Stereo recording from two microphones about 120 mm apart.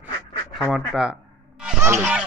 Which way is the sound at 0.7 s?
5° right (ahead or behind).